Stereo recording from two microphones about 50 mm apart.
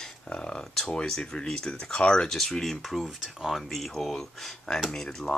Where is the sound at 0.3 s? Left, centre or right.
Centre.